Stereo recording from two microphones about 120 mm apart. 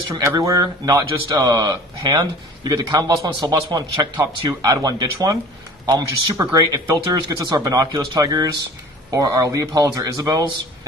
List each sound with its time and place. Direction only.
0.1 s speech: 25° right (ahead or behind)